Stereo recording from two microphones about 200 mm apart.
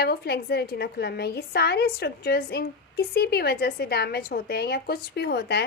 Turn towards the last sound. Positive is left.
turn(degrees=55)  # may be behind; listen again after turning